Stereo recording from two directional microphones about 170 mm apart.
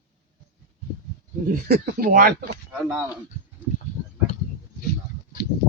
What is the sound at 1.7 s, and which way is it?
Speech, 60° right (ahead or behind).